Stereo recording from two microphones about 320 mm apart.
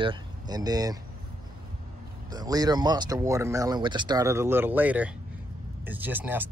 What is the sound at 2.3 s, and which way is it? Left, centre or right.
Speech, centre.